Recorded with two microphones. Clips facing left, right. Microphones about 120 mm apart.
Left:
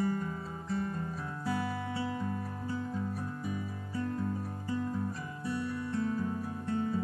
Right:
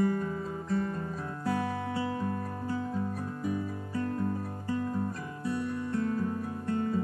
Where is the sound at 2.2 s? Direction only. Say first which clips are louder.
Right 3 dB; 50° right (ahead or behind).